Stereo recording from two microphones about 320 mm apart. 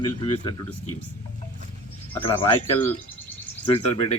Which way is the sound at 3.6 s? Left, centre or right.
Centre.